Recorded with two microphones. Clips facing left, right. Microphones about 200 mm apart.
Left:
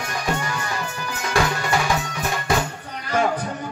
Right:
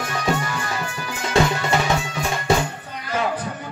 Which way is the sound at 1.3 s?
25° right (ahead or behind).